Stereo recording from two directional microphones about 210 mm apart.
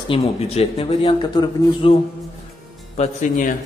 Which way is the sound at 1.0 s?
20° left (ahead or behind).